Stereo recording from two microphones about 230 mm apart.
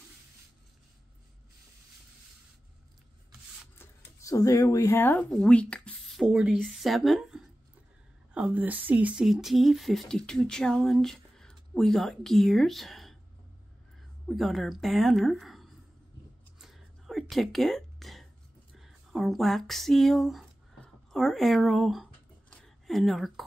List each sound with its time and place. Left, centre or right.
3.7 s speech: centre
14.2 s speech: centre
16.5 s whispering: centre
18.8 s a sound: centre